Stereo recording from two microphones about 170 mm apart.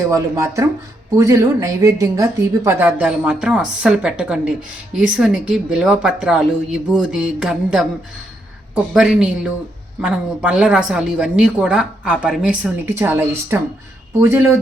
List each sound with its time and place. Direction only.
0.1 s a woman's voice: 15° right (ahead or behind)